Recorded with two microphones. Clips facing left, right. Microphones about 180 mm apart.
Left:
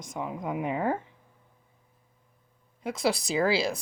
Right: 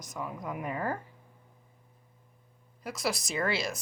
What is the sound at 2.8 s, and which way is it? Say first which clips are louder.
Speech: left 6 dB; 30° left (ahead or behind).